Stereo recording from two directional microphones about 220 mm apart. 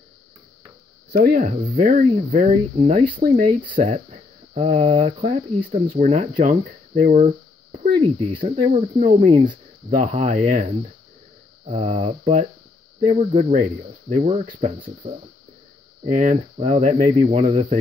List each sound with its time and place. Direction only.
1.1 s speech: 40° right (ahead or behind)